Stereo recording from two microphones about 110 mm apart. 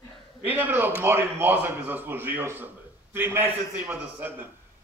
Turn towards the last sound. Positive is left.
turn(degrees=-20)  # may be behind; listen again after turning